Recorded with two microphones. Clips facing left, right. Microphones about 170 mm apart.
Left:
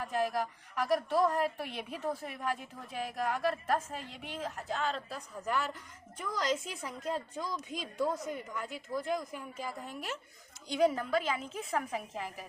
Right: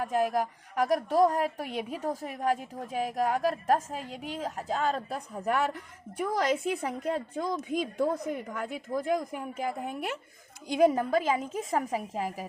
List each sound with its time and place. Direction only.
0.0 s a woman's voice: 45° right (ahead or behind)